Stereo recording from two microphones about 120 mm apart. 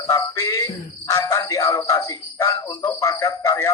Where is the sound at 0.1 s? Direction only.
25° left (ahead or behind).